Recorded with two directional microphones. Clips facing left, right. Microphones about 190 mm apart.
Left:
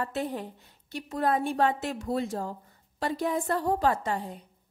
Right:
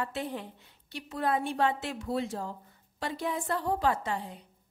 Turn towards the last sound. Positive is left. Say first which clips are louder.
# left 3 dB
turn(degrees=45)  # may be behind; listen again after turning